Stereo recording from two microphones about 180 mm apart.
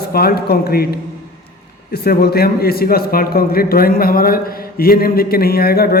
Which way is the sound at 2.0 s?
60° left (ahead or behind).